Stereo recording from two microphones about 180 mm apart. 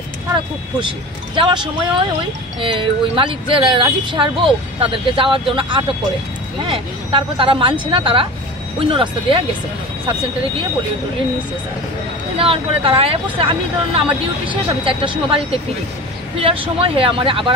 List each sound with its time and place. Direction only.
0.7 s speech: 30° right (ahead or behind)
12.4 s speech: 30° right (ahead or behind)